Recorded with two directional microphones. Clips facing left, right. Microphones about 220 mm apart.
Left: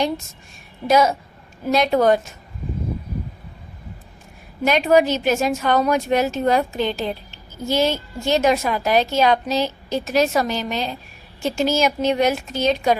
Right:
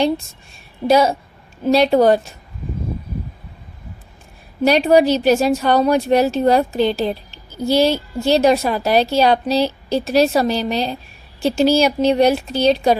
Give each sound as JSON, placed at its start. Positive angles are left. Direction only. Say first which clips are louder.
{"t": 0.9, "sound": "a woman's voice", "louder": "right 3 dB", "side_deg": -30}
{"t": 4.6, "sound": "a woman's voice", "louder": "right 3 dB", "side_deg": -35}